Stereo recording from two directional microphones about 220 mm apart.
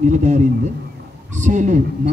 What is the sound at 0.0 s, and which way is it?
Speech, 30° right (ahead or behind).